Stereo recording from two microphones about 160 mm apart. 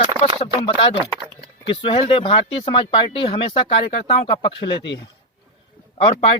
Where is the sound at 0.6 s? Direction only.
35° left (ahead or behind).